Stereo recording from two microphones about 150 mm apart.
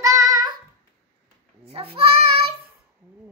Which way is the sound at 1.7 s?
40° right (ahead or behind).